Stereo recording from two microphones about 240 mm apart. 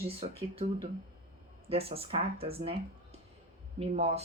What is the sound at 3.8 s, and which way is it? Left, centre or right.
Speech, right.